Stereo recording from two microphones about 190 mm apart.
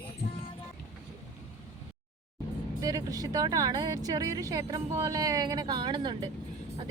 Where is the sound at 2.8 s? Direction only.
20° right (ahead or behind).